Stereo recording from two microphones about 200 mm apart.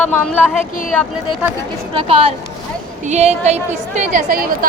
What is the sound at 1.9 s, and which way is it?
A woman's voice, 30° right (ahead or behind).